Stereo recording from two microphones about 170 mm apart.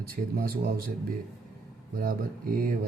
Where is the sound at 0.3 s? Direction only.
60° right (ahead or behind).